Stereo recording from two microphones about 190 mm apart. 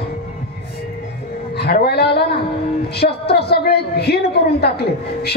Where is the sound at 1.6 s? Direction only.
60° left (ahead or behind).